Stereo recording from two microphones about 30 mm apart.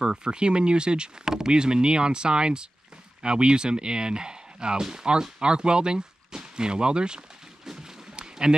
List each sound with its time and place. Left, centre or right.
0.0 s speech: right
1.2 s speech: centre
1.5 s speech: right
8.2 s a sound: right